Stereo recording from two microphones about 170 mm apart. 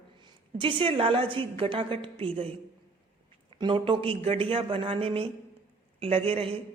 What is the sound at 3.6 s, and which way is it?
A woman's voice, 30° right (ahead or behind).